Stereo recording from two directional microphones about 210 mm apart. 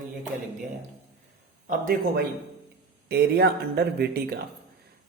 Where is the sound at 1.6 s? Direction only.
40° right (ahead or behind).